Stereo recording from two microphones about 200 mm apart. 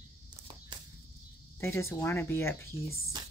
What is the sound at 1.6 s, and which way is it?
Speech, 15° left (ahead or behind).